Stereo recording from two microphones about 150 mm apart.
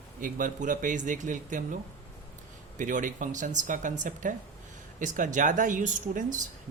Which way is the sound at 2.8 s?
60° right (ahead or behind).